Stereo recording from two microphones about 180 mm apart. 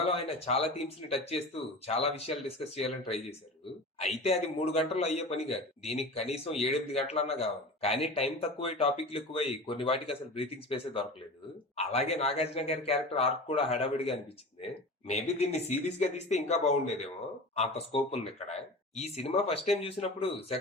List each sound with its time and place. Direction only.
0.1 s a man's voice: 35° left (ahead or behind)
3.9 s a man's voice: 35° left (ahead or behind)